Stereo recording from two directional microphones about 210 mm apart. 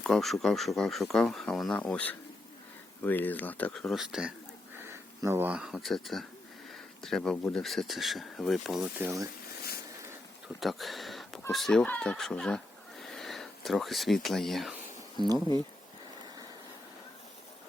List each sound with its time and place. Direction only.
0.0 s speech: centre (ahead or behind)
10.6 s a sound: centre (ahead or behind)
11.5 s speech: centre (ahead or behind)
15.2 s speech: 20° right (ahead or behind)